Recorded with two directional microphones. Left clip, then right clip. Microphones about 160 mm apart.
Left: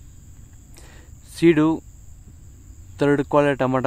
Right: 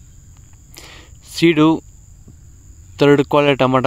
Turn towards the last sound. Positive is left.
turn(degrees=-25)  # may be behind; listen again after turning